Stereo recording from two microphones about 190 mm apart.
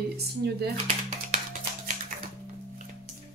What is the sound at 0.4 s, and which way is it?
Speech, 55° right (ahead or behind).